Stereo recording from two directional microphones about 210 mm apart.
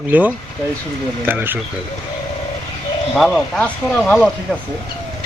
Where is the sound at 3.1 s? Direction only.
5° left (ahead or behind).